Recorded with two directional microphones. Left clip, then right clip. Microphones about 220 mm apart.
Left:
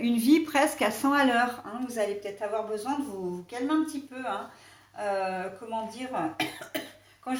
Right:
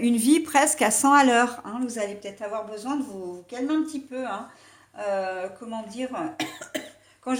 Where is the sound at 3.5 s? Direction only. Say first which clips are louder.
Right 2 dB; 40° right (ahead or behind).